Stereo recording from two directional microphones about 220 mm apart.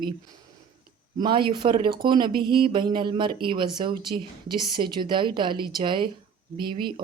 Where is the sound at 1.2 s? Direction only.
20° right (ahead or behind).